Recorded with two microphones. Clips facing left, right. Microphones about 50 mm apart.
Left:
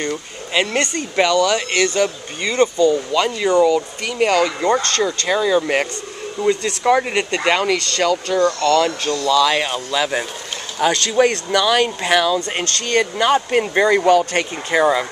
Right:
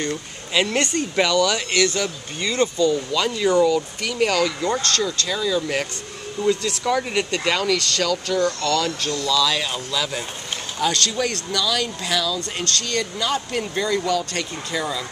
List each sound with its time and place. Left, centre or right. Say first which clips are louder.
0.5 s speech: left 2 dB; centre
7.2 s speech: left 3 dB; left
7.4 s speech: left 5 dB; left
9.2 s speech: left 6 dB; left